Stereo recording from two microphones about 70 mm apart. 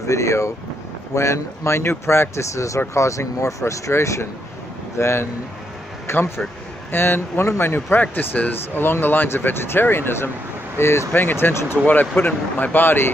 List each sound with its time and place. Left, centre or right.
0.0 s speech: left